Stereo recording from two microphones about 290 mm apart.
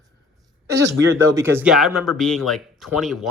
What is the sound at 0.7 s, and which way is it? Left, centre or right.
Speech, right.